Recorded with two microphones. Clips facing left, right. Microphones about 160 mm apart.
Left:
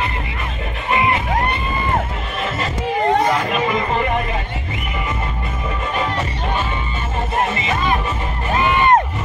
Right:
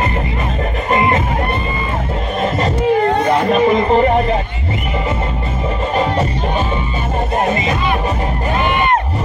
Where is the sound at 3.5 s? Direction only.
35° right (ahead or behind).